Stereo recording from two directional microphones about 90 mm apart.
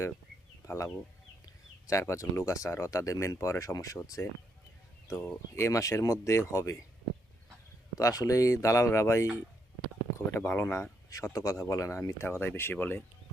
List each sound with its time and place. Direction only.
1.9 s speech: 35° left (ahead or behind)
7.9 s speech: 40° left (ahead or behind)
11.1 s speech: 40° left (ahead or behind); by 13.0 s 20° left (ahead or behind)